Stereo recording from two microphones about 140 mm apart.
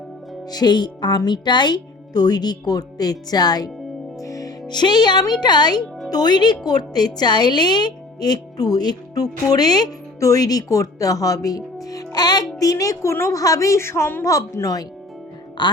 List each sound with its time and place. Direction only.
0.5 s a woman's voice: 30° left (ahead or behind)
4.2 s music: 25° left (ahead or behind)
4.7 s a woman's voice: 30° left (ahead or behind)